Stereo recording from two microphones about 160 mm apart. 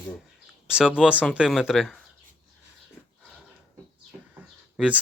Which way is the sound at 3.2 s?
Centre (ahead or behind).